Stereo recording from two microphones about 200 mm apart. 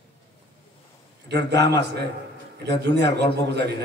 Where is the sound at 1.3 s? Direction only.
60° right (ahead or behind).